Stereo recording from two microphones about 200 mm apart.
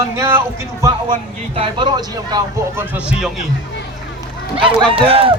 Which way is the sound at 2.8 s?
5° right (ahead or behind).